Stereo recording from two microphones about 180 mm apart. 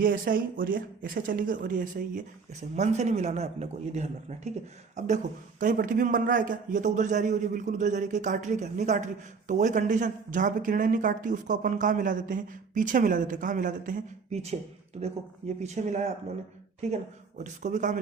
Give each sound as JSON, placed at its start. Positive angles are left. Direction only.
{"t": 0.0, "sound": "speech", "side_deg": -50}